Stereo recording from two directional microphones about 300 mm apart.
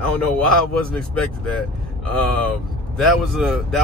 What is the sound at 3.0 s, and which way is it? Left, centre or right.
Speech, centre.